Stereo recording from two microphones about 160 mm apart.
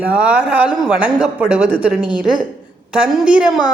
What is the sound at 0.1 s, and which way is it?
A woman's voice, 5° right (ahead or behind).